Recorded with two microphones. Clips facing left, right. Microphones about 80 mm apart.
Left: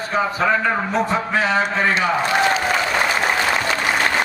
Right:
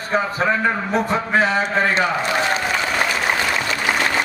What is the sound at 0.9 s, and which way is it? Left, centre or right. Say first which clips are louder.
Speech: right 1 dB; right.